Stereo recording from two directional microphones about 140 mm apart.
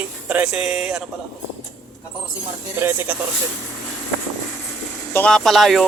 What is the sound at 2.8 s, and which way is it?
Speech, 15° right (ahead or behind).